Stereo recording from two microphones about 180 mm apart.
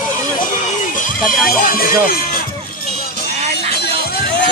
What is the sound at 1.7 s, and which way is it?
Speech, 50° left (ahead or behind).